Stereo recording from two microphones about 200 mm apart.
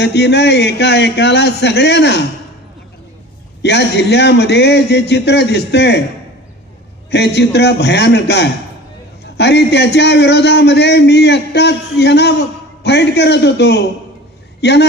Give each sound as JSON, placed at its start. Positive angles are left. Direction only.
{"t": 0.0, "sound": "a man's voice", "side_deg": 55}
{"t": 3.6, "sound": "a man's voice", "side_deg": 55}
{"t": 7.1, "sound": "a man's voice", "side_deg": 55}